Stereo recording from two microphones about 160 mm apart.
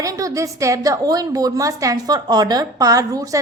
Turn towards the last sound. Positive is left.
turn(degrees=-20)  # may be behind; listen again after turning